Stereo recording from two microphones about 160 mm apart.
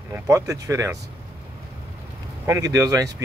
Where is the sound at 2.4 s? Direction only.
20° right (ahead or behind).